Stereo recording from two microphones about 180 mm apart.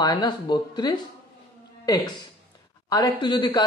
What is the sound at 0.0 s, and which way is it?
Speech, 25° left (ahead or behind).